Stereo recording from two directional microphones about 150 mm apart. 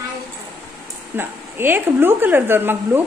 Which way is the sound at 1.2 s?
15° right (ahead or behind).